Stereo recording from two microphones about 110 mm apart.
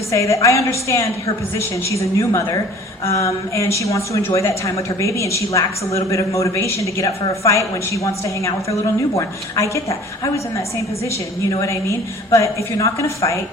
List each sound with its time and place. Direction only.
0.1 s speech: 30° left (ahead or behind)
9.1 s speech: 30° left (ahead or behind)
12.3 s speech: 30° left (ahead or behind)